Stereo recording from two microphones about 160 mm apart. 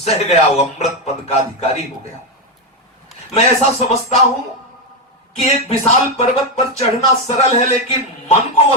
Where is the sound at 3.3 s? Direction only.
45° left (ahead or behind).